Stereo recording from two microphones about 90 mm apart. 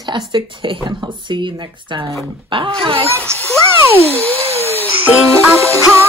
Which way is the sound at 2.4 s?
70° right (ahead or behind).